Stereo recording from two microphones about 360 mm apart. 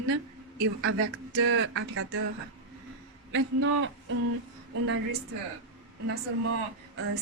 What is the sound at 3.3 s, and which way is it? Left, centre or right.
A man's voice, right.